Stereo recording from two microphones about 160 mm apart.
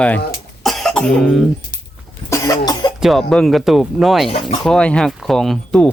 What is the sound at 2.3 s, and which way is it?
Cough, 20° left (ahead or behind).